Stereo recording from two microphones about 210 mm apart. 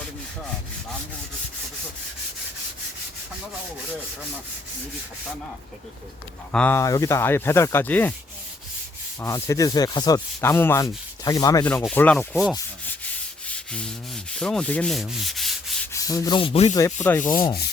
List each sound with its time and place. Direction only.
6.5 s sanding: 5° left (ahead or behind)
9.2 s sanding: 15° left (ahead or behind)
14.3 s rub: 5° left (ahead or behind)
15.9 s sanding: 15° left (ahead or behind)
16.7 s sanding: 10° left (ahead or behind)